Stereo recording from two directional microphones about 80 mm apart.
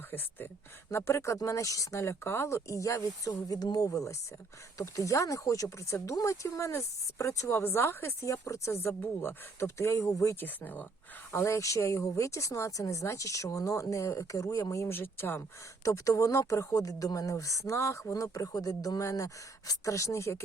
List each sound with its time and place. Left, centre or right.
0.1 s speech: left
3.5 s speech: left
7.6 s speech: left
8.7 s speech: left
10.4 s speech: left
11.3 s speech: left
14.9 s speech: left